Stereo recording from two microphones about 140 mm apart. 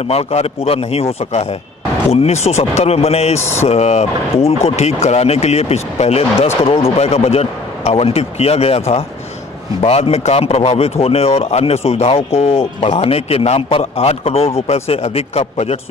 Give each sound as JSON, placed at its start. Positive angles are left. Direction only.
{"t": 0.1, "sound": "a man's voice", "side_deg": 50}